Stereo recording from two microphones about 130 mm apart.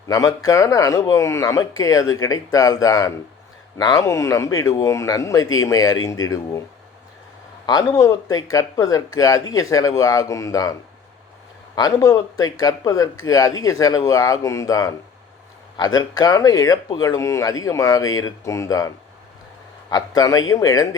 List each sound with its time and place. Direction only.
0.1 s speech: 25° left (ahead or behind)
7.7 s speech: 30° left (ahead or behind)